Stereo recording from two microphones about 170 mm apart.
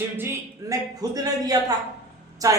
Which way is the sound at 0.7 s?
20° right (ahead or behind).